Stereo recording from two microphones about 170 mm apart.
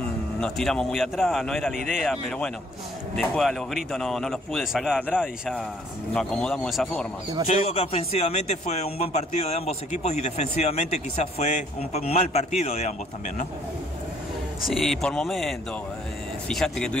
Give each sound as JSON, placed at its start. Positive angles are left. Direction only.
{"t": 0.4, "sound": "a man's voice", "side_deg": 5}
{"t": 7.4, "sound": "a man's voice", "side_deg": 35}
{"t": 14.6, "sound": "a man's voice", "side_deg": 0}